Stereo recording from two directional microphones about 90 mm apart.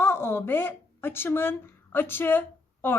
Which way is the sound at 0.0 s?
30° left (ahead or behind).